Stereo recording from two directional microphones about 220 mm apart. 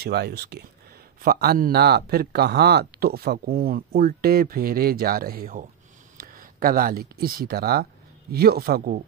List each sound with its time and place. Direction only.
0.0 s speech: 45° right (ahead or behind)